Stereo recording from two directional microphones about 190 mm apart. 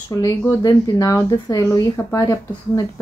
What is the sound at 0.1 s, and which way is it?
Speech, 15° left (ahead or behind).